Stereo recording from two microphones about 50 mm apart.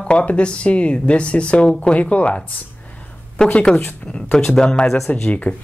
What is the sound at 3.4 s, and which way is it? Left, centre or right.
A woman's voice, centre.